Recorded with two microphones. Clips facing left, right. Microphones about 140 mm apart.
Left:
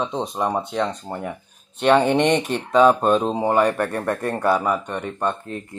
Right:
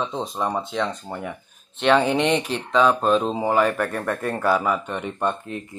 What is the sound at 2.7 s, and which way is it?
Speech, centre (ahead or behind).